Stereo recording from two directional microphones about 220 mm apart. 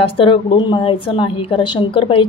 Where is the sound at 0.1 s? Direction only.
25° left (ahead or behind).